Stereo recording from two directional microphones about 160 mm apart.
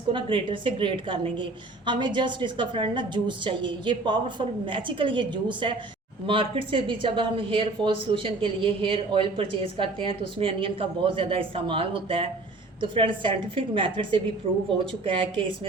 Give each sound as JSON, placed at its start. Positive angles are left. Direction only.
{"t": 0.1, "sound": "speech", "side_deg": -30}